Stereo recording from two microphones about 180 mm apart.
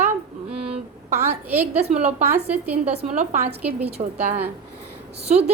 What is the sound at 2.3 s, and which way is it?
Speech, 10° right (ahead or behind).